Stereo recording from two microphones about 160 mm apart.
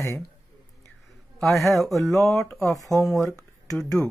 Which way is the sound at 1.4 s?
Centre (ahead or behind).